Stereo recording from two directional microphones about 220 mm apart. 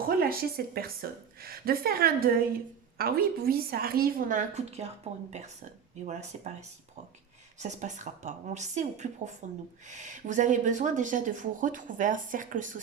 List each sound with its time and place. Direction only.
0.2 s a woman's voice: 45° right (ahead or behind)
6.1 s speech: 30° right (ahead or behind)